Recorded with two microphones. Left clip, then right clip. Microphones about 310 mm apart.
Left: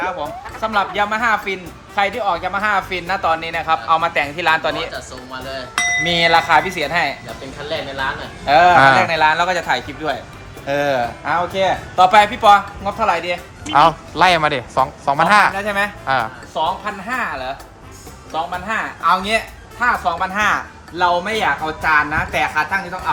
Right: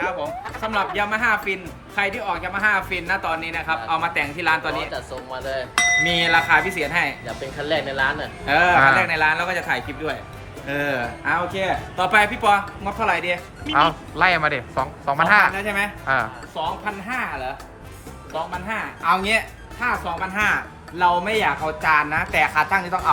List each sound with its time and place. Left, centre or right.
0.0 s a sound: centre
0.7 s speech: centre
5.3 s speech: right
5.7 s a sound: centre
6.1 s speech: centre
8.4 s speech: centre
18.7 s speech: centre